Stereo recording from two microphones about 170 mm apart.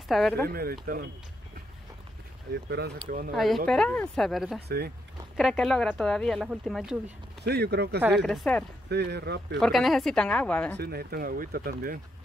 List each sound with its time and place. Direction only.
0.1 s speech: centre (ahead or behind)
0.5 s speech: 60° right (ahead or behind)
2.7 s speech: 65° right (ahead or behind)
3.3 s speech: centre (ahead or behind)
4.6 s speech: 70° right (ahead or behind)
5.4 s speech: centre (ahead or behind)
7.4 s speech: 75° right (ahead or behind)
8.1 s speech: centre (ahead or behind)
8.8 s speech: 80° right
9.6 s speech: centre (ahead or behind)
10.8 s speech: 65° right (ahead or behind)